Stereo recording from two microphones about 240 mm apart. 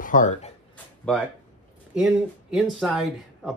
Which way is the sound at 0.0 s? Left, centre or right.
Left.